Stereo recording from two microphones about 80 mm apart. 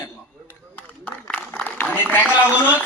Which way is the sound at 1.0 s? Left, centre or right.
Centre.